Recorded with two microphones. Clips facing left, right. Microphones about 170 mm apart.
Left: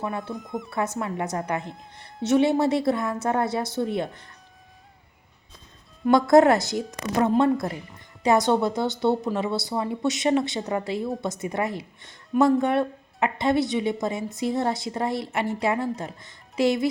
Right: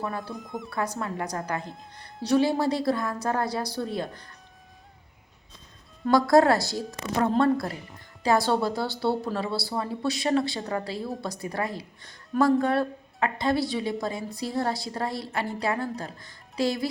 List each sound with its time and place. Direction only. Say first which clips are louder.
0.3 s a woman's voice: left 3 dB; centre (ahead or behind)
0.7 s speech: left 2 dB; 25° left (ahead or behind)
6.1 s speech: left 3 dB; 20° left (ahead or behind)